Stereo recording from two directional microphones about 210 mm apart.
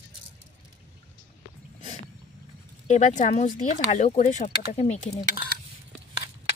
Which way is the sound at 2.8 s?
35° left (ahead or behind).